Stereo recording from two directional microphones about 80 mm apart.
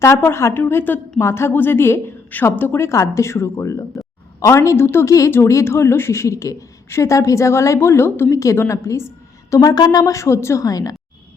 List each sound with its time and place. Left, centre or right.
0.0 s a woman's voice: left
9.5 s a woman's voice: left